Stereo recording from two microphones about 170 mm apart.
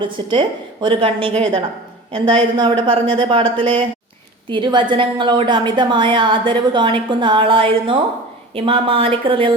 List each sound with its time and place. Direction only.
0.0 s a woman's voice: 30° right (ahead or behind)